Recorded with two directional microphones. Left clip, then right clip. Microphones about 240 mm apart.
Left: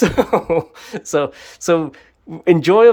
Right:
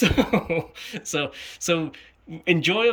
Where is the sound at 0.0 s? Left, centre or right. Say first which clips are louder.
Left 6 dB; centre.